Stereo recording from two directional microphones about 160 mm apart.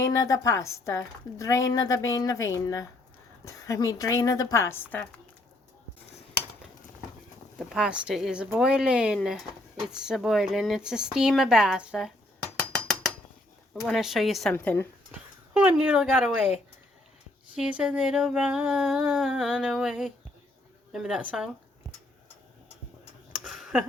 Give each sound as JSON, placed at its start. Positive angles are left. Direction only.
{"t": 0.0, "sound": "a woman's voice", "side_deg": 20}
{"t": 7.7, "sound": "speech", "side_deg": -5}
{"t": 13.8, "sound": "speech", "side_deg": 0}
{"t": 14.5, "sound": "speech", "side_deg": 10}
{"t": 15.5, "sound": "speech", "side_deg": -10}
{"t": 17.5, "sound": "speech", "side_deg": -5}
{"t": 23.4, "sound": "a sound", "side_deg": 0}